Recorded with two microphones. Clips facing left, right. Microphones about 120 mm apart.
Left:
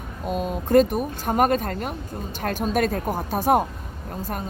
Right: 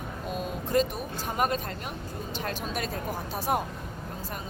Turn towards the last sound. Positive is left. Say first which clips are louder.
# left 9 dB
turn(degrees=50)  # may be behind; listen again after turning